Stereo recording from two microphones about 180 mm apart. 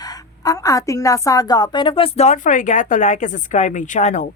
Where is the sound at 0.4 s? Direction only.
20° left (ahead or behind).